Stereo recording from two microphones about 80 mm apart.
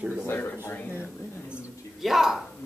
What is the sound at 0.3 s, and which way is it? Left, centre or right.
Speech, left.